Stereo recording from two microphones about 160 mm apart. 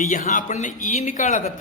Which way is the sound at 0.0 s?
55° left (ahead or behind).